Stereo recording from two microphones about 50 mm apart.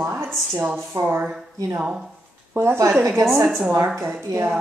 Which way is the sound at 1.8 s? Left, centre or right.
Centre.